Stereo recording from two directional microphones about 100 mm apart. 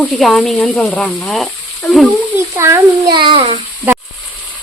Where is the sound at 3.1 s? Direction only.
55° right (ahead or behind).